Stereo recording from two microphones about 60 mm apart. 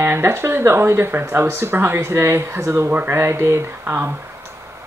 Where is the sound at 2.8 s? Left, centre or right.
Right.